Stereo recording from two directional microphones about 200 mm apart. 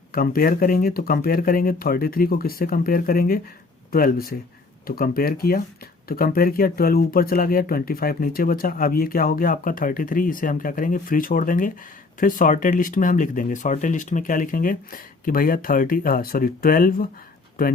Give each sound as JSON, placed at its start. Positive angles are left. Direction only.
{"t": 0.1, "sound": "speech", "side_deg": 45}